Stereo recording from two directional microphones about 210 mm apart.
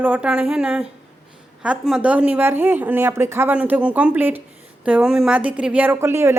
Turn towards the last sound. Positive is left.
turn(degrees=-10)  # may be behind; listen again after turning